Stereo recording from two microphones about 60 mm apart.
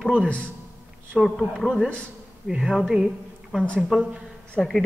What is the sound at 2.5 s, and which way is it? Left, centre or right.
A woman's voice, centre.